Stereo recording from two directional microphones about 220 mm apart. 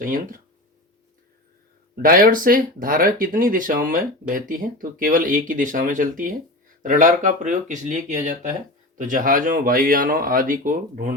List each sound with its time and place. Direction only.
0.0 s speech: 35° right (ahead or behind)
2.0 s speech: 40° right (ahead or behind)